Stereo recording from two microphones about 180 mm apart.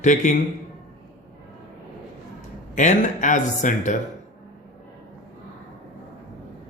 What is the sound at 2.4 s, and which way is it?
Speech, 40° left (ahead or behind).